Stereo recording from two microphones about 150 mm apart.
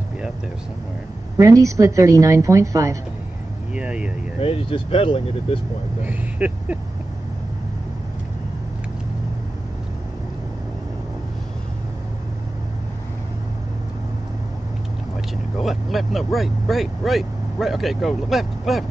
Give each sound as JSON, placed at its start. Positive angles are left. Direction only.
{"t": 1.4, "sound": "a woman's voice", "side_deg": -20}
{"t": 3.7, "sound": "speech", "side_deg": -5}
{"t": 4.4, "sound": "speech", "side_deg": 40}
{"t": 6.0, "sound": "speech", "side_deg": -10}
{"t": 15.5, "sound": "speech", "side_deg": 0}